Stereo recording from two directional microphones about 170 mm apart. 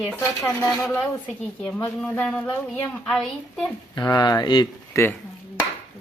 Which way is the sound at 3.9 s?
25° left (ahead or behind).